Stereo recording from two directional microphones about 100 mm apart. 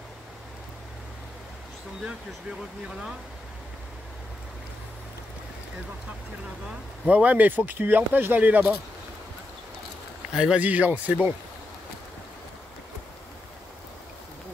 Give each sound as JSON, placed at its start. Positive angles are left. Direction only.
{"t": 6.7, "sound": "speech", "side_deg": -15}
{"t": 10.3, "sound": "speech", "side_deg": -10}